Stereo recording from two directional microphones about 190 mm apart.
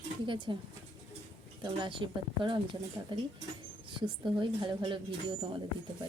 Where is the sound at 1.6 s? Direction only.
25° right (ahead or behind).